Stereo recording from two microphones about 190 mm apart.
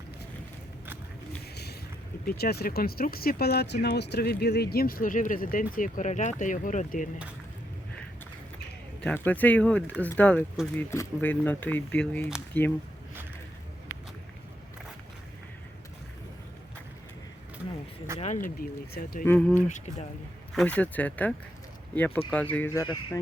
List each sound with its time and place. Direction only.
2.2 s speech: 55° left (ahead or behind)
9.0 s speech: 10° left (ahead or behind)
18.2 s speech: 40° left (ahead or behind)
19.2 s speech: 10° left (ahead or behind)
19.6 s speech: 35° left (ahead or behind)
20.5 s speech: 5° left (ahead or behind)